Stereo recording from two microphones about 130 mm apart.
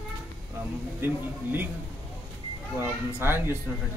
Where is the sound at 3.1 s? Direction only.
15° right (ahead or behind).